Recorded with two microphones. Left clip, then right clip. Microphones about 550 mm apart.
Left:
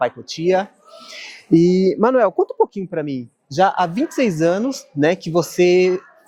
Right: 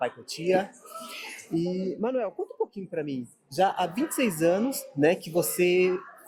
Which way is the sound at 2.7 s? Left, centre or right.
Left.